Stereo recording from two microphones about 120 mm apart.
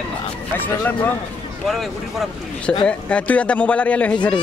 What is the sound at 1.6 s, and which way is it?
Speech, centre (ahead or behind).